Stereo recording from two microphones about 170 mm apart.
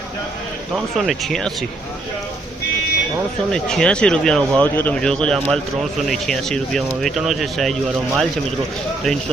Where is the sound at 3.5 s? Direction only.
5° left (ahead or behind).